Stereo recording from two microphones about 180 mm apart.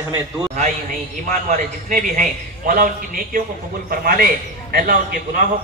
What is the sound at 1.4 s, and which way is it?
A man's voice, 45° right (ahead or behind).